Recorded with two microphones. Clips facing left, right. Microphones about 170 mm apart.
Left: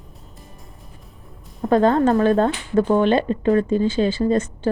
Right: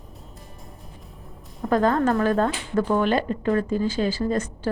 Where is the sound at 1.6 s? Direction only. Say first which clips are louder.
Left 4 dB; 25° left (ahead or behind).